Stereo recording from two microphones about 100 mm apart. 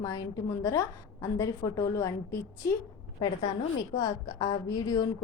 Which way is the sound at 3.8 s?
45° left (ahead or behind).